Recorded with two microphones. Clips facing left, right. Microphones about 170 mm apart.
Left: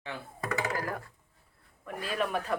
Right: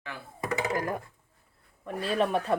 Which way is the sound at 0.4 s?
20° right (ahead or behind).